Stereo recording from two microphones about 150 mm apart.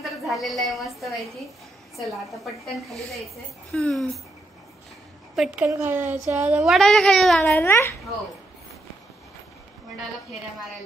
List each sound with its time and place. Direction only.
0.0 s a woman's voice: centre (ahead or behind)
5.3 s a woman's voice: 5° right (ahead or behind)
5.7 s a woman's voice: 15° right (ahead or behind)
6.6 s a woman's voice: centre (ahead or behind)
7.4 s a child's voice: 15° left (ahead or behind)